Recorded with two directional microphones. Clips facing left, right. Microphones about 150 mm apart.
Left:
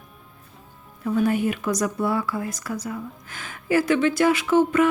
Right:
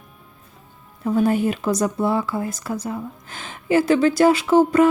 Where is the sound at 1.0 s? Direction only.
30° right (ahead or behind).